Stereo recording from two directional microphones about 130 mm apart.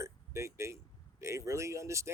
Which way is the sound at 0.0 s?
20° right (ahead or behind).